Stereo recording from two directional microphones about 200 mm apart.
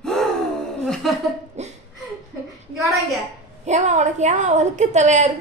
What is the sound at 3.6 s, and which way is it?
A woman's voice, 35° right (ahead or behind).